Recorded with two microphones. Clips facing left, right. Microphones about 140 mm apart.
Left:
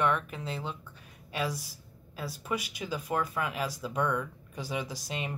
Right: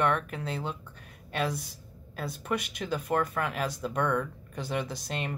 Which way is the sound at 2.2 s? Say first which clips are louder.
Right 2 dB; 5° left (ahead or behind).